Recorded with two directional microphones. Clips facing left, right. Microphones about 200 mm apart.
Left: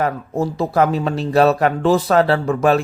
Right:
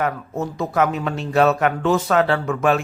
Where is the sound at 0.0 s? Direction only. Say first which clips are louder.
Left 4 dB; 35° left (ahead or behind).